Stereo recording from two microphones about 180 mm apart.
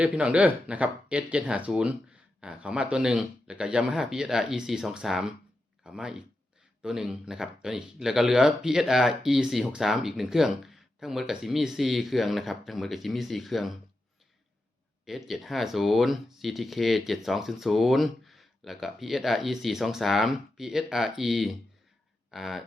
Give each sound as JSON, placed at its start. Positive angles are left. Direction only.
{"t": 0.0, "sound": "speech", "side_deg": -5}
{"t": 15.0, "sound": "speech", "side_deg": 0}